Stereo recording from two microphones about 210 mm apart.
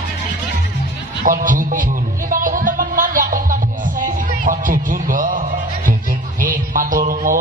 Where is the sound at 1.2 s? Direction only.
40° right (ahead or behind).